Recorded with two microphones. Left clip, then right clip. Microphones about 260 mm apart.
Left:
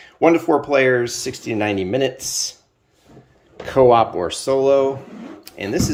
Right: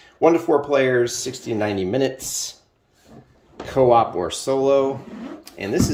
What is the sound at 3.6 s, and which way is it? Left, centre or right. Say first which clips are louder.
Speech: left 3 dB; centre.